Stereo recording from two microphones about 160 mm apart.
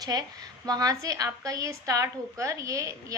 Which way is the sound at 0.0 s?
25° right (ahead or behind).